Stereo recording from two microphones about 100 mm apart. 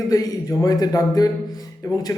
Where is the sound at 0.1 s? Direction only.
35° left (ahead or behind).